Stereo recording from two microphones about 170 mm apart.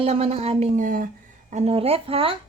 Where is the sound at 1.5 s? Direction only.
40° right (ahead or behind).